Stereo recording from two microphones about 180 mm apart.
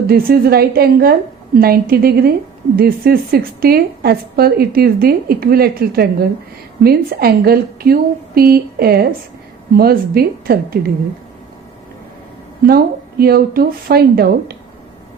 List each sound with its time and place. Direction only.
0.1 s a woman's voice: 55° right (ahead or behind)
12.6 s a woman's voice: 55° right (ahead or behind)